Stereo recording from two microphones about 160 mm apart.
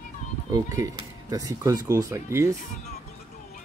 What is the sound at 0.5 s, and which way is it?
Speech, 20° right (ahead or behind).